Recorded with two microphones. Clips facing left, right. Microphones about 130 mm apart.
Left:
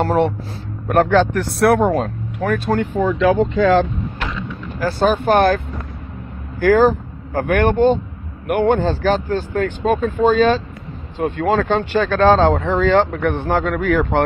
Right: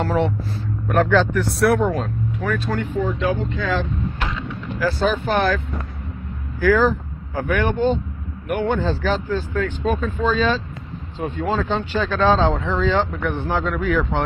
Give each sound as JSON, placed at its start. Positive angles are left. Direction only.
{"t": 0.0, "sound": "speech", "side_deg": 55}
{"t": 1.9, "sound": "speech", "side_deg": 45}
{"t": 3.1, "sound": "speech", "side_deg": 90}
{"t": 4.9, "sound": "speech", "side_deg": 60}
{"t": 6.6, "sound": "speech", "side_deg": 55}
{"t": 8.5, "sound": "speech", "side_deg": 65}
{"t": 8.7, "sound": "speech", "side_deg": 55}